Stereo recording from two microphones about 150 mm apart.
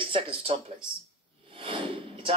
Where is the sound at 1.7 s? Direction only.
35° right (ahead or behind).